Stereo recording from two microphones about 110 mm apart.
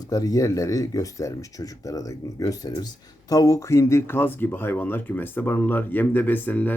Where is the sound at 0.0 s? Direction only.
35° left (ahead or behind).